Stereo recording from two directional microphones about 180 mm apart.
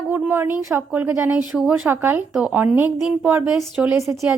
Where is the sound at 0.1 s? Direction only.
10° right (ahead or behind).